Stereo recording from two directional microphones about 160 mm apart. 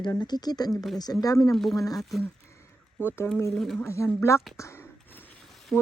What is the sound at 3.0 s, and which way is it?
Speech, 15° left (ahead or behind).